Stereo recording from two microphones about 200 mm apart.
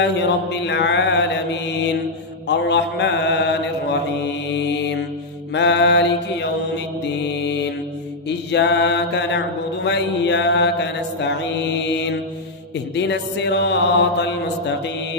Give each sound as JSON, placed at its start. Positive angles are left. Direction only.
{"t": 0.0, "sound": "mantra", "side_deg": 60}
{"t": 8.3, "sound": "mantra", "side_deg": 60}